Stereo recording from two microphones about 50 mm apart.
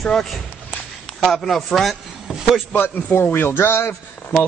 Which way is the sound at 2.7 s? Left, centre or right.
Left.